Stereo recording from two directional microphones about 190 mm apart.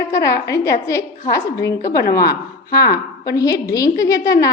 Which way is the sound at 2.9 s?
55° left (ahead or behind).